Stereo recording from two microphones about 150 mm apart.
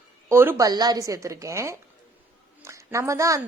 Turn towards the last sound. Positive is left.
turn(degrees=-20)  # may be behind; listen again after turning